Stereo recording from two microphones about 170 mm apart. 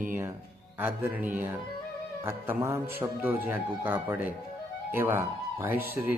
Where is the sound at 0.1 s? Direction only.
15° right (ahead or behind).